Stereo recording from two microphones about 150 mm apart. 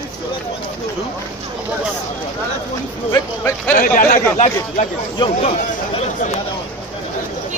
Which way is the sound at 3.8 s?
60° left (ahead or behind).